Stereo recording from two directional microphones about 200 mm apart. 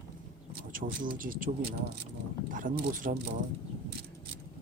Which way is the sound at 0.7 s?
45° right (ahead or behind).